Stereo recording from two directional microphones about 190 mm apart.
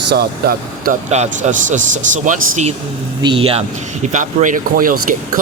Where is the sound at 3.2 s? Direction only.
25° right (ahead or behind).